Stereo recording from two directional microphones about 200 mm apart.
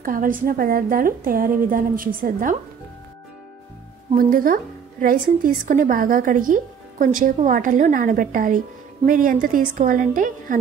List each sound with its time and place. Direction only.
0.0 s speech: 45° right (ahead or behind)
4.1 s speech: 45° right (ahead or behind)